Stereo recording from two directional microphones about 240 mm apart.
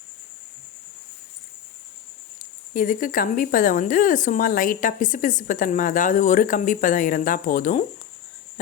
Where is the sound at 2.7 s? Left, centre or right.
Left.